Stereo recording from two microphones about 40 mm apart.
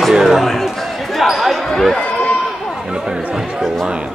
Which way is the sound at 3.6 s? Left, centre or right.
Centre.